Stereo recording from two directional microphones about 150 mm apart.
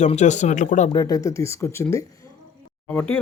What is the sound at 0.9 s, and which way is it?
Speech, 25° left (ahead or behind).